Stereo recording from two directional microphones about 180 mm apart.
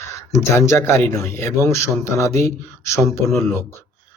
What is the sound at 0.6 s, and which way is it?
Speech, 15° left (ahead or behind).